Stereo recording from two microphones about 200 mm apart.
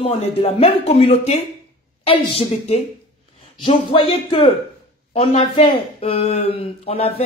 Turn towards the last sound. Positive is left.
turn(degrees=30)  # may be behind; listen again after turning